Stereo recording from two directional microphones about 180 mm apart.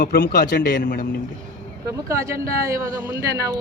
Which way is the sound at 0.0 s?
55° left (ahead or behind).